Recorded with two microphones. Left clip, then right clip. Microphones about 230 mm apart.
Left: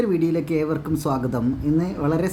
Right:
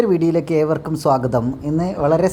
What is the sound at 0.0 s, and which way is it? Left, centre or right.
Speech, centre.